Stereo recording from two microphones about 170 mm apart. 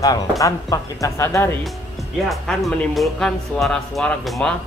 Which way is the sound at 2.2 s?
Centre (ahead or behind).